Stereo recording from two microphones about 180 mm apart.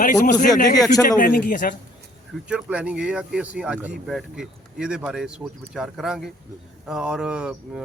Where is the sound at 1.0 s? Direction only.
50° left (ahead or behind).